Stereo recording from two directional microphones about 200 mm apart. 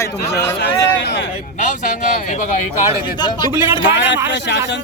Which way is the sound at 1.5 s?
40° left (ahead or behind).